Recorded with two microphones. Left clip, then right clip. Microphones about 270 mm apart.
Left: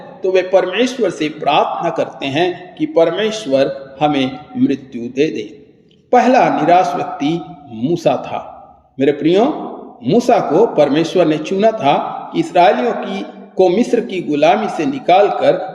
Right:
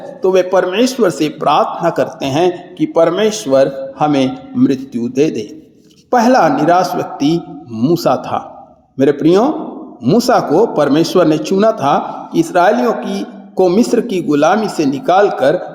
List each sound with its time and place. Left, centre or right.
0.2 s speech: right